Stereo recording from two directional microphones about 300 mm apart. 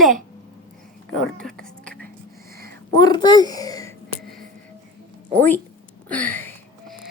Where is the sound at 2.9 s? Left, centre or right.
Centre.